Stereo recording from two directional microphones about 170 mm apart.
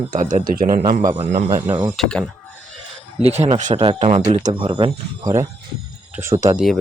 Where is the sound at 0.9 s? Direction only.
25° right (ahead or behind).